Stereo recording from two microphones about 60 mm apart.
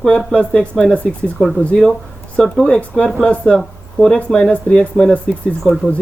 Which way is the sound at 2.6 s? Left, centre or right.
Left.